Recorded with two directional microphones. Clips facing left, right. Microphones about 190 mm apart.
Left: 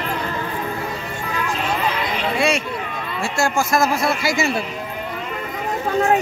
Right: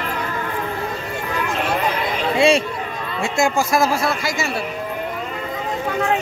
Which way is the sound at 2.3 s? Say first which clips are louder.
Right 6 dB; 25° right (ahead or behind).